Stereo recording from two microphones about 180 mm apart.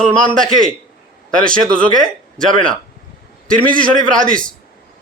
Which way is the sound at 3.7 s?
50° right (ahead or behind).